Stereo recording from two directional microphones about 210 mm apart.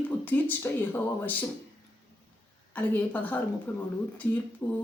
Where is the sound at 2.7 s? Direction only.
5° left (ahead or behind).